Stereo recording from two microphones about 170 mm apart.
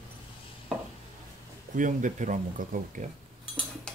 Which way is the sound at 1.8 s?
50° right (ahead or behind).